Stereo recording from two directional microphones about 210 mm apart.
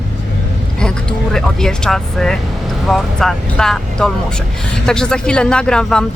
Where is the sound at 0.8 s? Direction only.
5° left (ahead or behind).